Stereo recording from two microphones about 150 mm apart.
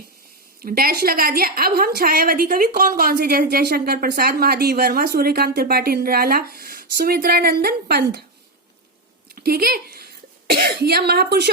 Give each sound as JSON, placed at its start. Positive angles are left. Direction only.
{"t": 0.6, "sound": "a woman's voice", "side_deg": -80}
{"t": 9.3, "sound": "speech", "side_deg": -90}